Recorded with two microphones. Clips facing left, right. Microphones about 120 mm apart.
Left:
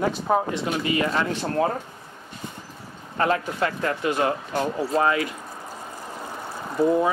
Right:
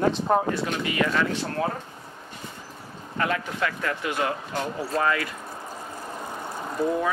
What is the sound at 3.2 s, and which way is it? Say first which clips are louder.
Speech: left 4 dB; 35° left (ahead or behind).